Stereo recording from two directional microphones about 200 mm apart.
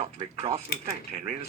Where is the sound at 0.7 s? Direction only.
50° left (ahead or behind).